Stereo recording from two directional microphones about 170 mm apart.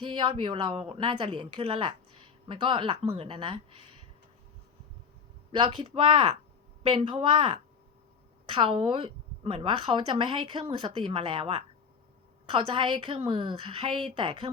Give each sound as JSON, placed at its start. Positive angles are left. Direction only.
{"t": 0.0, "sound": "a woman's voice", "side_deg": -30}
{"t": 5.5, "sound": "a woman's voice", "side_deg": -30}